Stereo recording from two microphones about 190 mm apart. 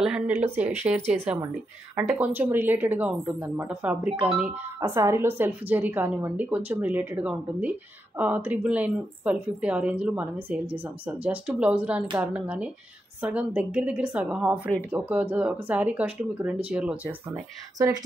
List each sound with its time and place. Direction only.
0.0 s a woman's voice: 5° right (ahead or behind)
1.0 s a woman's voice: 35° right (ahead or behind)
2.1 s a woman's voice: 10° right (ahead or behind)